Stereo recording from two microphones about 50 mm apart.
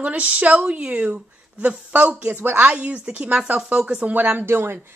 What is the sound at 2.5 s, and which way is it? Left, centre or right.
A woman's voice, right.